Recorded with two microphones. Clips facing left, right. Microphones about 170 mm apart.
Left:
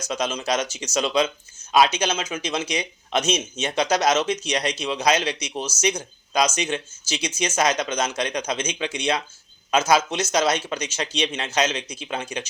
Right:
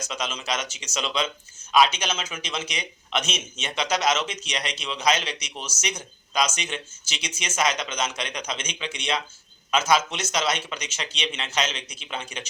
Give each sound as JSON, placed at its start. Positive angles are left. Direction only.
{"t": 0.0, "sound": "speech", "side_deg": 40}